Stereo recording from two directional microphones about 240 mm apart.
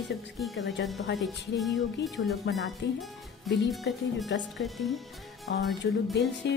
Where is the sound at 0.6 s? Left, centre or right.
Left.